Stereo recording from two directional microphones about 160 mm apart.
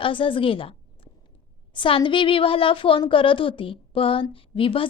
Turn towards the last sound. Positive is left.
turn(degrees=35)  # may be behind; listen again after turning